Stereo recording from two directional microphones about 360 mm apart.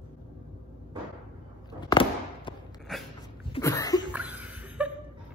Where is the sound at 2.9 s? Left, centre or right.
Centre.